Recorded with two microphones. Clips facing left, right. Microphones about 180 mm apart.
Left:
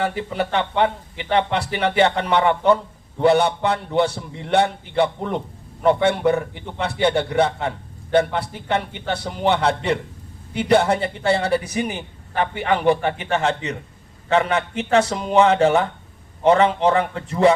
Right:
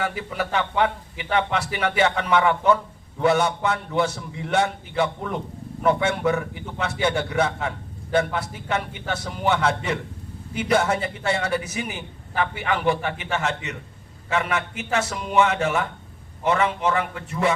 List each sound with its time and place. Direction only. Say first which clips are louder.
0.0 s a man's voice: left 4 dB; 30° left (ahead or behind)